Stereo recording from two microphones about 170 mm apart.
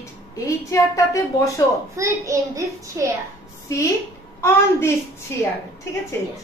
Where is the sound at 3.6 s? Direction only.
20° left (ahead or behind).